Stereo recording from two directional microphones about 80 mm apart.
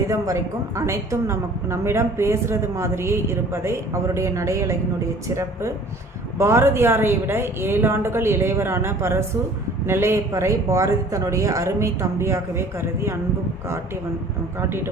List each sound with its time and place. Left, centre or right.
0.1 s a woman's voice: right